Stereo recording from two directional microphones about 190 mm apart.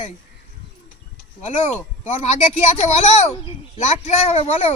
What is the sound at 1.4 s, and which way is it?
Speech, 35° left (ahead or behind).